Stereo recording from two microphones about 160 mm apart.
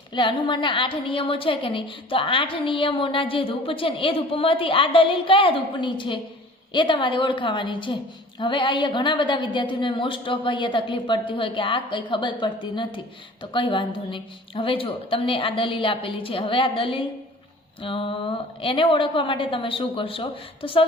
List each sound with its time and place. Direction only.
0.1 s a woman's voice: 30° left (ahead or behind)